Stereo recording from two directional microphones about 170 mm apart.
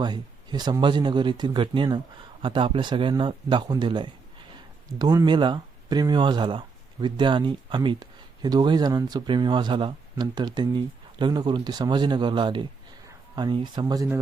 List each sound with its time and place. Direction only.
0.0 s speech: 25° right (ahead or behind)